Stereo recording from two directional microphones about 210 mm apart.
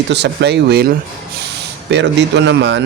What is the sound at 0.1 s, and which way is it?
Speech, 55° right (ahead or behind).